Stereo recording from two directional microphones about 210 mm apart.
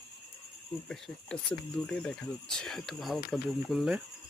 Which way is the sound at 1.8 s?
5° left (ahead or behind).